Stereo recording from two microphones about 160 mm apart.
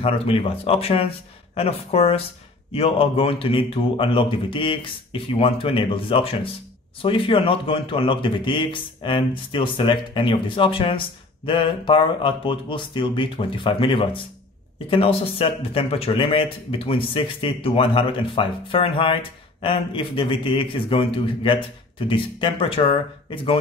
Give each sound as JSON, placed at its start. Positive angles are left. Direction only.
{"t": 0.0, "sound": "speech", "side_deg": 35}